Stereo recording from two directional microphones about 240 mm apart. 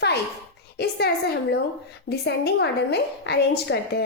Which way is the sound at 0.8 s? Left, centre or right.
Left.